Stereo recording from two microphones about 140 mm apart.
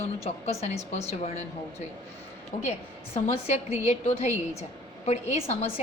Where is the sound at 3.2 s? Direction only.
50° left (ahead or behind).